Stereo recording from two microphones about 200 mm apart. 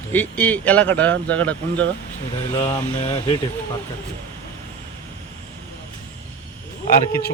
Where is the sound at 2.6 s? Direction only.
25° left (ahead or behind).